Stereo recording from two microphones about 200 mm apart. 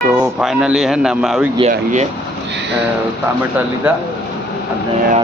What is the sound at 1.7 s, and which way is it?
Speech, 35° right (ahead or behind).